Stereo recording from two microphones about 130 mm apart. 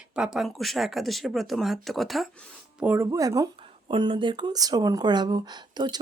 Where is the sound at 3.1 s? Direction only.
25° right (ahead or behind).